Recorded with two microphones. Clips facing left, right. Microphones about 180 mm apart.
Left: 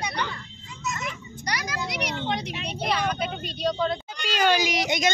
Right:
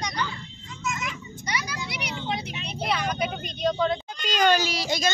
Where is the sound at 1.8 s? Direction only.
60° left (ahead or behind).